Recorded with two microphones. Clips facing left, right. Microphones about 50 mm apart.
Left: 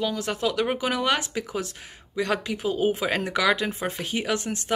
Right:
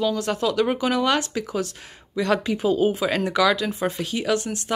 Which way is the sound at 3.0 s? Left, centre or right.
Centre.